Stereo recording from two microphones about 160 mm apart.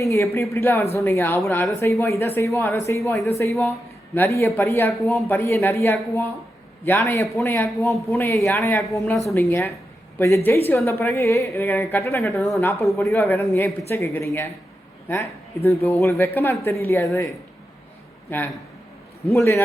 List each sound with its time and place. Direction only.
0.0 s speech: 20° left (ahead or behind)
18.3 s a man's voice: 10° left (ahead or behind)